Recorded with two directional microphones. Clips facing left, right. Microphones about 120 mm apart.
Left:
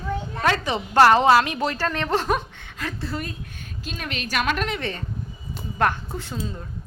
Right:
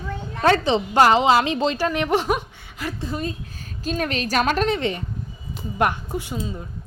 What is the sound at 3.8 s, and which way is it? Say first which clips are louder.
Speech: right 8 dB; 40° right (ahead or behind).